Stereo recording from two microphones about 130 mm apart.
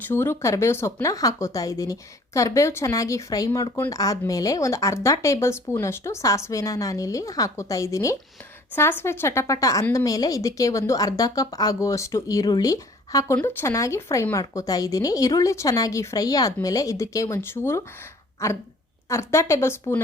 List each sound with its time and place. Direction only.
0.1 s speech: 20° left (ahead or behind)